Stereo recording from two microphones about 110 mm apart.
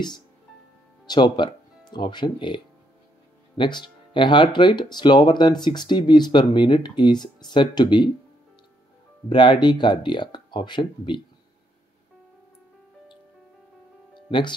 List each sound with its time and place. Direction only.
1.0 s speech: 40° left (ahead or behind)
9.3 s speech: 45° left (ahead or behind)
14.1 s music: 45° left (ahead or behind)